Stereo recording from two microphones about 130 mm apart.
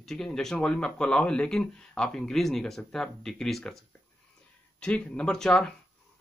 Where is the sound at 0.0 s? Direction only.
5° left (ahead or behind).